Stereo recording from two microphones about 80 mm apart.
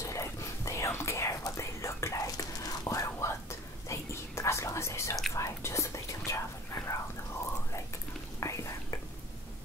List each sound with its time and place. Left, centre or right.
0.0 s whispering: left
8.4 s whispering: left